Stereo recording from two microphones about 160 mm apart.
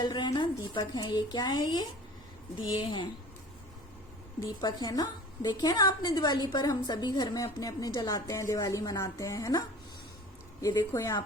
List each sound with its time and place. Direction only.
0.0 s a woman's voice: 25° left (ahead or behind)
4.4 s a woman's voice: 25° left (ahead or behind)